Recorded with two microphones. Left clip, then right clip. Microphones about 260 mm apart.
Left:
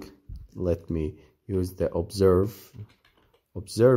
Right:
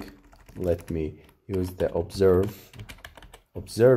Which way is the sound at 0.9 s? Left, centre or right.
Left.